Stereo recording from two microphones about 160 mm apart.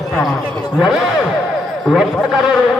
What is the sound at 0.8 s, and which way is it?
A man's voice, 5° right (ahead or behind).